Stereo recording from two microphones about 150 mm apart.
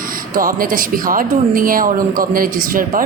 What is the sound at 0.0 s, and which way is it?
Speech, 70° right (ahead or behind).